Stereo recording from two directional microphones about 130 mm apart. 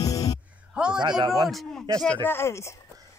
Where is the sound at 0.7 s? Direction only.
5° right (ahead or behind).